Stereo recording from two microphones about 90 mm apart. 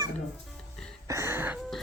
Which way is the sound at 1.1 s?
30° right (ahead or behind).